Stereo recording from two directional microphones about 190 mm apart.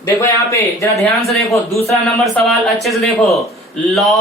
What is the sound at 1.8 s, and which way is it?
Speech, 15° left (ahead or behind).